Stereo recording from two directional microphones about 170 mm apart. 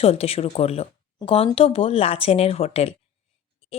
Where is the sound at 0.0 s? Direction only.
35° left (ahead or behind).